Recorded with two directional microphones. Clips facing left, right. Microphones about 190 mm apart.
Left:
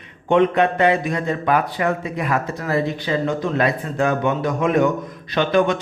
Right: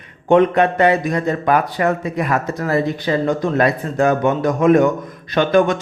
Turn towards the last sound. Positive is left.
turn(degrees=-45)  # may be behind; listen again after turning